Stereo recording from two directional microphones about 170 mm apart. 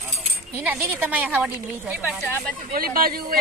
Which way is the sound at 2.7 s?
60° right (ahead or behind).